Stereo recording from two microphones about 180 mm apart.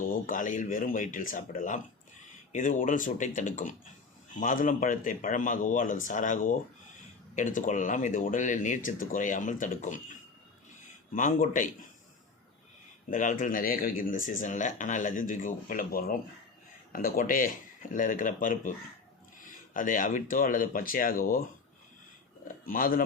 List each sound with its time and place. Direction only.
0.0 s speech: 50° left (ahead or behind)
11.1 s speech: 45° left (ahead or behind)
13.1 s speech: 45° left (ahead or behind)
22.4 s speech: 50° left (ahead or behind)